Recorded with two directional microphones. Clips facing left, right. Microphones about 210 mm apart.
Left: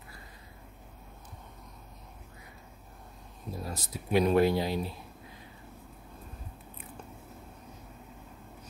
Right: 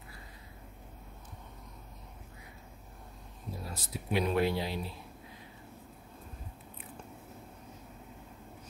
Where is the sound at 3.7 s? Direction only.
45° left (ahead or behind).